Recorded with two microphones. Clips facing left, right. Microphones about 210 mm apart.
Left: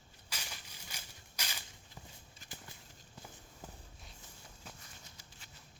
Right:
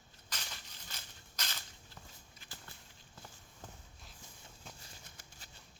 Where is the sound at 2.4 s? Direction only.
45° left (ahead or behind).